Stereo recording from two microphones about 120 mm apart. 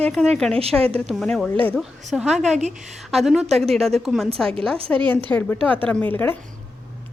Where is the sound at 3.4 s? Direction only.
60° right (ahead or behind).